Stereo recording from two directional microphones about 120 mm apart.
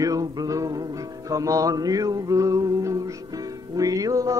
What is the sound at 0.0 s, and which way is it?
Music, 30° right (ahead or behind).